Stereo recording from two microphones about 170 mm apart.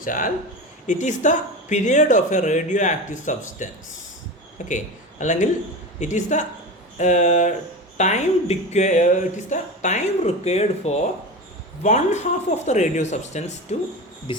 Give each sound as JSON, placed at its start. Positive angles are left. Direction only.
{"t": 0.0, "sound": "speech", "side_deg": 50}
{"t": 5.2, "sound": "speech", "side_deg": 45}
{"t": 14.3, "sound": "speech", "side_deg": 30}